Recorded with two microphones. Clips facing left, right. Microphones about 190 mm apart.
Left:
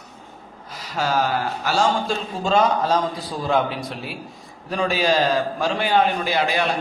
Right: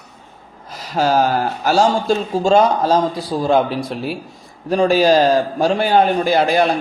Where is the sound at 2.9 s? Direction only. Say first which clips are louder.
Right 6 dB; 45° right (ahead or behind).